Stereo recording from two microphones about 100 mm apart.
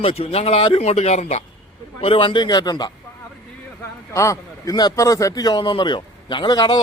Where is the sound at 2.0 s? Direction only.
65° left (ahead or behind); by 2.9 s 45° left (ahead or behind).